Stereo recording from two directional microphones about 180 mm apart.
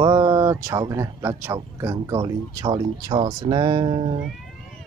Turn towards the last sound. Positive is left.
turn(degrees=-25)  # may be behind; listen again after turning